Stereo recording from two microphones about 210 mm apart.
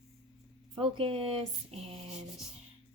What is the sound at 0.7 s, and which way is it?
Speech, 25° right (ahead or behind).